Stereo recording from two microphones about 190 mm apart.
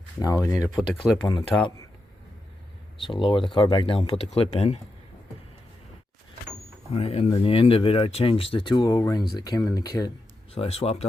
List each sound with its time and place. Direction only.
0.2 s speech: 20° left (ahead or behind)
3.0 s speech: 25° left (ahead or behind)
6.9 s speech: 35° left (ahead or behind)
10.5 s speech: 30° left (ahead or behind)